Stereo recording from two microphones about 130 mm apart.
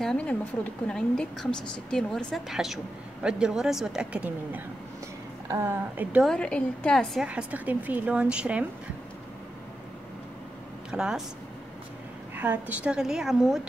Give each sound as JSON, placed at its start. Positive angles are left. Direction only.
{"t": 0.0, "sound": "a woman's voice", "side_deg": 5}
{"t": 6.2, "sound": "a woman's voice", "side_deg": 5}
{"t": 7.2, "sound": "a woman's voice", "side_deg": -10}
{"t": 10.9, "sound": "a woman's voice", "side_deg": -5}
{"t": 12.4, "sound": "a woman's voice", "side_deg": -15}